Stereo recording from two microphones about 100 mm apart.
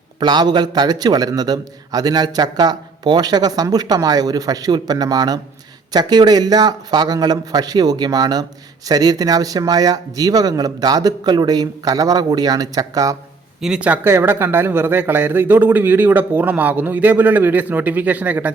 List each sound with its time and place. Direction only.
0.2 s a man's voice: 45° right (ahead or behind)
13.6 s speech: 10° right (ahead or behind)
14.1 s a man's voice: 25° right (ahead or behind)